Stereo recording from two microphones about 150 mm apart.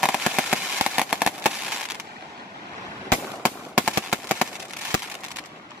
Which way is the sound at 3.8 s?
10° right (ahead or behind).